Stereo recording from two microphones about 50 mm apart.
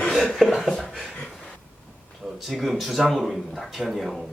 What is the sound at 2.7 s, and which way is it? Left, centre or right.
Speech, centre.